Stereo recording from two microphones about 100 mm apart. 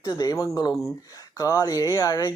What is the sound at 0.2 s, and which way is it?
Speech, 40° left (ahead or behind).